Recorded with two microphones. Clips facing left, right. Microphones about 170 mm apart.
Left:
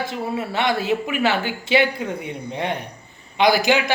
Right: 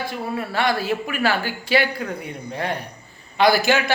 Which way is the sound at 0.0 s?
25° left (ahead or behind).